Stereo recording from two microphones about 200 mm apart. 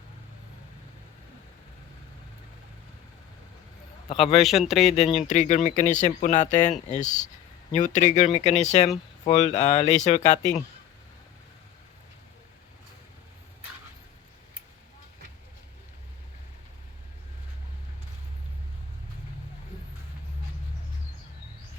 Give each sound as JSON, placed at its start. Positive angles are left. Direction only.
{"t": 4.1, "sound": "speech", "side_deg": 30}
{"t": 4.4, "sound": "speech", "side_deg": 0}
{"t": 4.9, "sound": "speech", "side_deg": 35}